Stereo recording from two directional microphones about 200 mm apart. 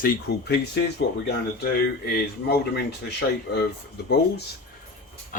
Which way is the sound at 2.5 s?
55° left (ahead or behind).